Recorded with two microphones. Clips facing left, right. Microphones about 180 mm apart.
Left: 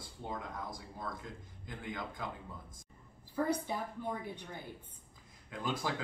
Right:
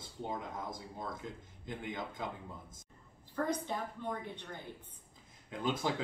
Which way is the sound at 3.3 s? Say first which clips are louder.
Left 1 dB; 10° left (ahead or behind).